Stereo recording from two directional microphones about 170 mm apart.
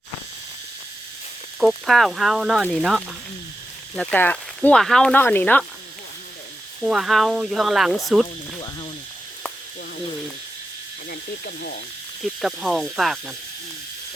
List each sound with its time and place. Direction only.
1.5 s speech: centre (ahead or behind)
6.8 s speech: centre (ahead or behind)
11.1 s speech: 60° left (ahead or behind)
12.2 s speech: centre (ahead or behind)